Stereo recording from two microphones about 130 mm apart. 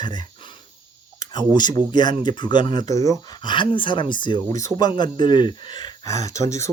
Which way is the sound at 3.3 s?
35° left (ahead or behind).